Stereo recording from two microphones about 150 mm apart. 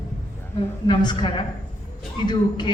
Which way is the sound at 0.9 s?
30° left (ahead or behind).